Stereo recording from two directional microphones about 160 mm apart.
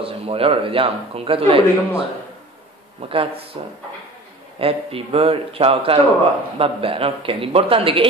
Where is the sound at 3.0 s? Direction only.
35° right (ahead or behind).